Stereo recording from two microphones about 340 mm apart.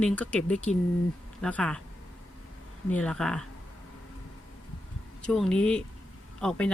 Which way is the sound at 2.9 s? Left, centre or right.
Centre.